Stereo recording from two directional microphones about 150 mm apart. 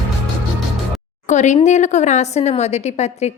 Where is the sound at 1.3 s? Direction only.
50° left (ahead or behind).